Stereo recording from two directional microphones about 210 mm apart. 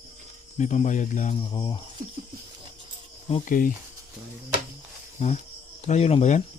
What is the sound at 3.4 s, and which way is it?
Speech, 40° left (ahead or behind).